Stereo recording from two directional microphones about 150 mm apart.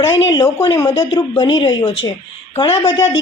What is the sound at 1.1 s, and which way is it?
A woman's voice, 30° left (ahead or behind).